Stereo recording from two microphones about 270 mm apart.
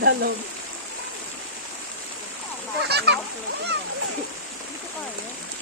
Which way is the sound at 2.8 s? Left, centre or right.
Right.